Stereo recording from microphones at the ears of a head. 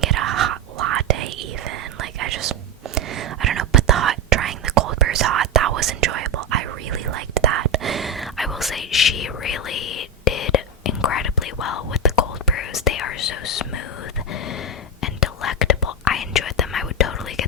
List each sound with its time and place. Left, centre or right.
0.0 s whispering: right
8.8 s whispering: left
15.0 s whispering: left